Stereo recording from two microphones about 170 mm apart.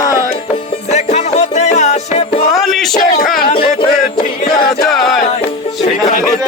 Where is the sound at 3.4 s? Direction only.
30° left (ahead or behind).